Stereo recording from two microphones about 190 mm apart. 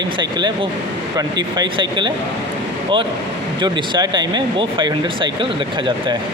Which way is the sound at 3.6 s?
25° right (ahead or behind).